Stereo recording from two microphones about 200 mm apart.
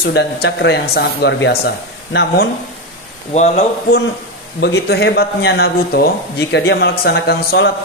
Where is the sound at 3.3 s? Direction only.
35° left (ahead or behind).